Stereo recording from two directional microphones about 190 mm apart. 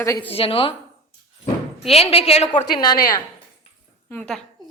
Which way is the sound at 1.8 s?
30° left (ahead or behind).